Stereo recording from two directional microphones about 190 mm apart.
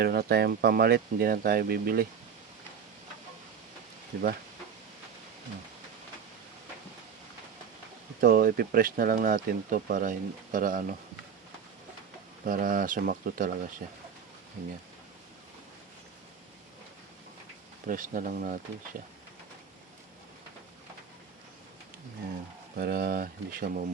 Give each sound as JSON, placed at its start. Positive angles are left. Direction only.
{"t": 0.0, "sound": "speech", "side_deg": -55}
{"t": 8.2, "sound": "speech", "side_deg": -50}
{"t": 12.5, "sound": "speech", "side_deg": -45}
{"t": 17.8, "sound": "speech", "side_deg": -45}
{"t": 22.8, "sound": "speech", "side_deg": -50}